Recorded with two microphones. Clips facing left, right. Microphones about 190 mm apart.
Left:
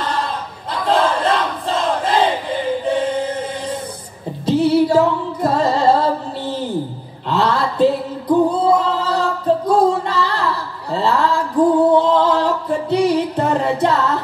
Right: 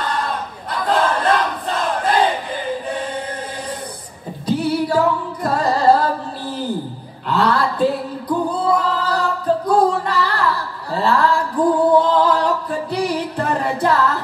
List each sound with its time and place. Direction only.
0.8 s battle cry: 25° left (ahead or behind)
2.8 s chant: 25° left (ahead or behind)
4.5 s music: 25° left (ahead or behind)
7.2 s a sound: 25° left (ahead or behind)
8.5 s singing: 25° left (ahead or behind)
11.9 s music: 25° left (ahead or behind)